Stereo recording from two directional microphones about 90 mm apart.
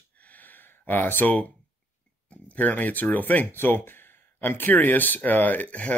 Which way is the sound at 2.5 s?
20° left (ahead or behind).